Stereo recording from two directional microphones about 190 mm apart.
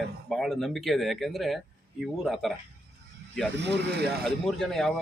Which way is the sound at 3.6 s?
65° right (ahead or behind).